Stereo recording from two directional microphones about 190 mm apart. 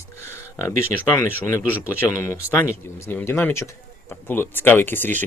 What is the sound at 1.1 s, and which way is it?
Speech, 15° left (ahead or behind).